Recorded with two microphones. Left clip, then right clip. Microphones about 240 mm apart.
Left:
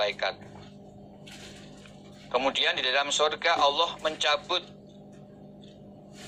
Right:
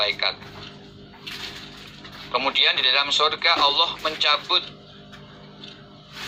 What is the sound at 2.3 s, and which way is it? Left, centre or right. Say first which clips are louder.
A man's voice: right 6 dB; left.